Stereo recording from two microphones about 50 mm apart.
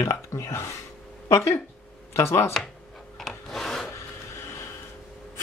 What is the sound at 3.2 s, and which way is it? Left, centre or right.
Rub, centre.